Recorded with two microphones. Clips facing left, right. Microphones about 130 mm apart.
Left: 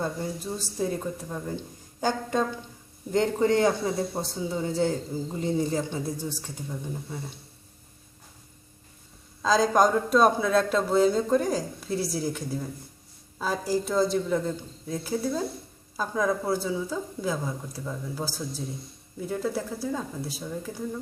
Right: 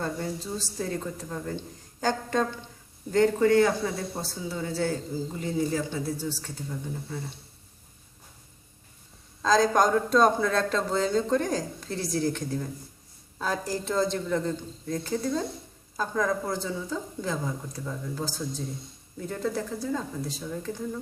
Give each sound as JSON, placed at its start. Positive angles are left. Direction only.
{"t": 0.0, "sound": "a man's voice", "side_deg": 15}
{"t": 9.4, "sound": "a man's voice", "side_deg": 5}